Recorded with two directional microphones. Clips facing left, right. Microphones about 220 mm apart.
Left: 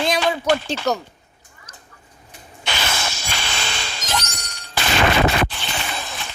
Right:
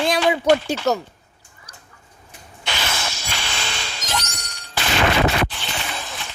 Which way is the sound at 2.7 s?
50° left (ahead or behind).